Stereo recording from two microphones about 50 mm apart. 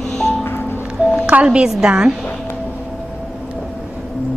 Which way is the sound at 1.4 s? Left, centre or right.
Centre.